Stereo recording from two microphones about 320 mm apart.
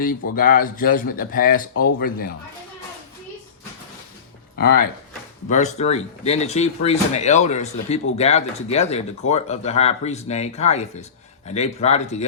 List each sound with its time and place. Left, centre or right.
0.3 s speech: left
4.5 s speech: left